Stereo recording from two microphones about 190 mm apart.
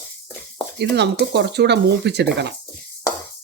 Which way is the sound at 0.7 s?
65° right (ahead or behind).